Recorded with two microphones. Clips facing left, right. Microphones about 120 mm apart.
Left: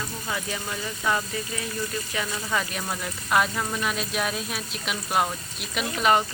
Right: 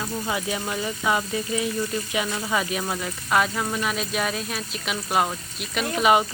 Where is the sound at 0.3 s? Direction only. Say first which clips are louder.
Right 3 dB; 20° right (ahead or behind).